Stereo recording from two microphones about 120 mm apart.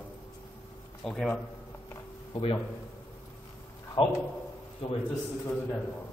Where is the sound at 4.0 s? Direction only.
45° left (ahead or behind).